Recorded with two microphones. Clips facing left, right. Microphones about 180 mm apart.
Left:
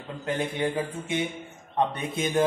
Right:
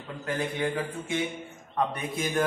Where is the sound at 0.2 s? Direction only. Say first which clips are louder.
Left 2 dB; 20° left (ahead or behind).